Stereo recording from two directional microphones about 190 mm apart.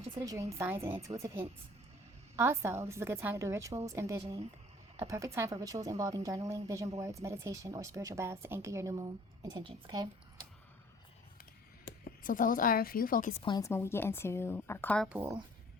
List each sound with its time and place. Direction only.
0.2 s speech: 15° right (ahead or behind)
2.3 s speech: 15° right (ahead or behind)
11.9 s speech: 50° left (ahead or behind)
13.4 s speech: 20° left (ahead or behind)
15.1 s speech: 5° right (ahead or behind)